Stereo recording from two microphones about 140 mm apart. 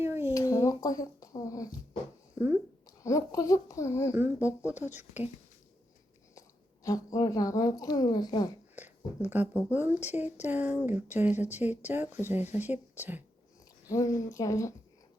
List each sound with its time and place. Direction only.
0.0 s a sound: 20° right (ahead or behind)
0.3 s speech: 25° left (ahead or behind)
2.4 s speech: 20° right (ahead or behind)
3.0 s a woman's voice: 20° left (ahead or behind)
4.1 s speech: 15° right (ahead or behind)
6.8 s a woman's voice: 25° left (ahead or behind)
8.7 s speech: 15° right (ahead or behind)
13.8 s a woman's voice: 25° left (ahead or behind)